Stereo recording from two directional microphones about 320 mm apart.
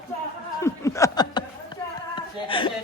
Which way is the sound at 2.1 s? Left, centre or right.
Centre.